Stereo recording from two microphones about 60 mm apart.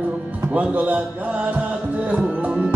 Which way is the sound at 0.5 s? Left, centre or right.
Right.